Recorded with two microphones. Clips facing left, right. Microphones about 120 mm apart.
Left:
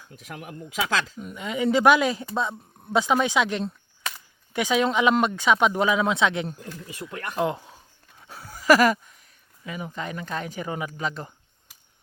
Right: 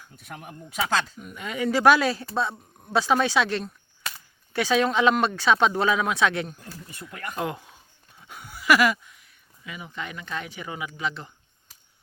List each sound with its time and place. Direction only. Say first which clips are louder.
0.1 s speech: left 3 dB; 90° left
1.4 s speech: left 2 dB; 20° left (ahead or behind)
8.3 s a sound: left 3 dB; 35° left (ahead or behind)
9.6 s speech: left 4 dB; 40° left (ahead or behind)